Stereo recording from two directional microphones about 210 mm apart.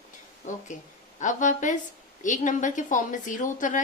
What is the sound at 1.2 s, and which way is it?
A woman's voice, 35° left (ahead or behind).